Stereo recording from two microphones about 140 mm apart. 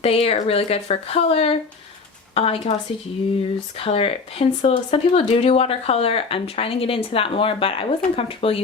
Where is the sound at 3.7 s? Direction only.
45° left (ahead or behind).